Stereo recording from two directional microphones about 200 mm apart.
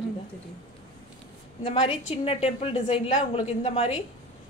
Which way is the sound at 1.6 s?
25° left (ahead or behind).